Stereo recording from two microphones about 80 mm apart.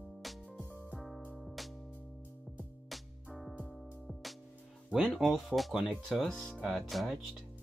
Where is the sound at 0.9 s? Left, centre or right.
Centre.